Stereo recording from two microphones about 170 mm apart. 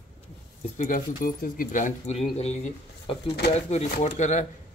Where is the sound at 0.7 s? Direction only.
45° left (ahead or behind).